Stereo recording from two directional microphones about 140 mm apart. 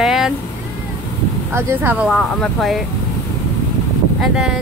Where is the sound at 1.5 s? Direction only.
10° right (ahead or behind).